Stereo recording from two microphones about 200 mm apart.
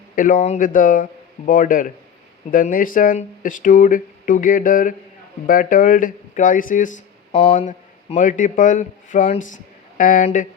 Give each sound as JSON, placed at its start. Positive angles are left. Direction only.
{"t": 0.2, "sound": "a man's voice", "side_deg": 40}